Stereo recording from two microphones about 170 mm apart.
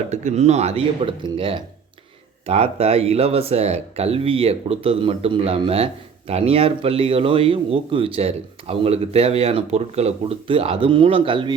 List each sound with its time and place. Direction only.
0.1 s speech: 45° right (ahead or behind)